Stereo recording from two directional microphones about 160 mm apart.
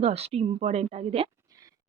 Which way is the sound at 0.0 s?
40° right (ahead or behind).